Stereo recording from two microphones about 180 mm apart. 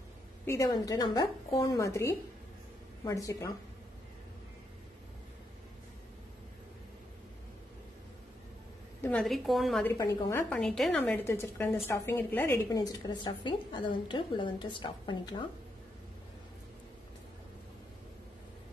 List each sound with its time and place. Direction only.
0.5 s a woman's voice: 20° left (ahead or behind)
9.0 s a woman's voice: 5° left (ahead or behind)
9.8 s speech: 15° left (ahead or behind)
10.6 s a woman's voice: 5° left (ahead or behind); by 15.4 s 25° left (ahead or behind)